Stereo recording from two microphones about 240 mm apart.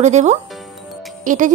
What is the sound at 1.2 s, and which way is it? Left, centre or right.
Music, right.